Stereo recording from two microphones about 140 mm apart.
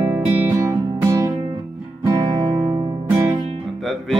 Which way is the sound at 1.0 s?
25° right (ahead or behind).